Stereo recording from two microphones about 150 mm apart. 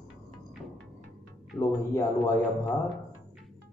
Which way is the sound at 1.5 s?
20° left (ahead or behind).